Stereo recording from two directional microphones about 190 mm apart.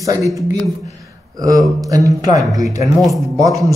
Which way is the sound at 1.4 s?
20° right (ahead or behind).